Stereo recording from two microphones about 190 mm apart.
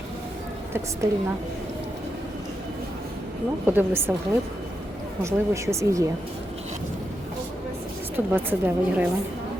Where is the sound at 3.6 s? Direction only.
10° right (ahead or behind).